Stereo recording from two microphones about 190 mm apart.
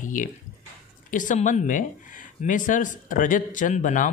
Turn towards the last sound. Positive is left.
turn(degrees=40)  # may be behind; listen again after turning